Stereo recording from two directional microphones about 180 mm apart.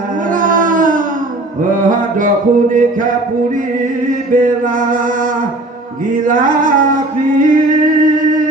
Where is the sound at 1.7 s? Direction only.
50° right (ahead or behind).